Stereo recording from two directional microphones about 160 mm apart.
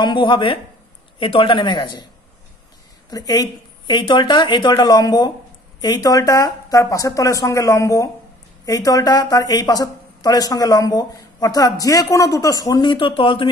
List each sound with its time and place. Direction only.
0.0 s speech: 30° left (ahead or behind)
3.1 s speech: 25° left (ahead or behind)